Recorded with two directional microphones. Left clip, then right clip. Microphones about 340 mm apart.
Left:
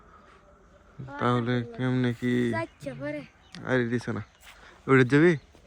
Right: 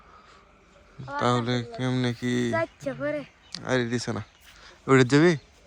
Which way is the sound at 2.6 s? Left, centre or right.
Right.